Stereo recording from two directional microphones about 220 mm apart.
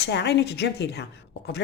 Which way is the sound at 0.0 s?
50° left (ahead or behind).